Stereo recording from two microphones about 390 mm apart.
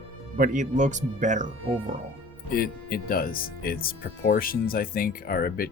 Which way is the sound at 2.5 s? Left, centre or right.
Left.